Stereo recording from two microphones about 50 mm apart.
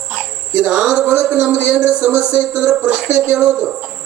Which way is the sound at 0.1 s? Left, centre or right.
Centre.